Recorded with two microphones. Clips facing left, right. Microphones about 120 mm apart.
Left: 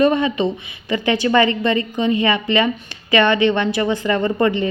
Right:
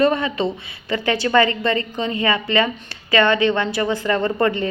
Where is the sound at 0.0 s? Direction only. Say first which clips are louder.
Left 2 dB; 20° left (ahead or behind).